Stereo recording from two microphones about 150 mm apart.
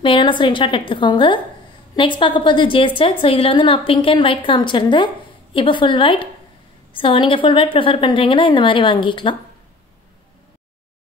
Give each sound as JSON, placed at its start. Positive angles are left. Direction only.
{"t": 0.0, "sound": "a woman's voice", "side_deg": 35}